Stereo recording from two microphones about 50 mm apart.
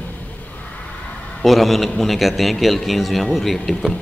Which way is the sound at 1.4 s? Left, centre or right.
Centre.